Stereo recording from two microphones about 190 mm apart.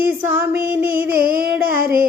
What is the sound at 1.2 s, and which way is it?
Music, 50° right (ahead or behind).